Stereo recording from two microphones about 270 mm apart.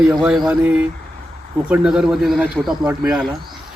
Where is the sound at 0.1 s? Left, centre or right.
Centre.